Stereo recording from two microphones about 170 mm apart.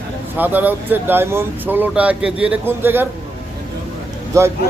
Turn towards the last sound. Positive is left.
turn(degrees=-15)  # may be behind; listen again after turning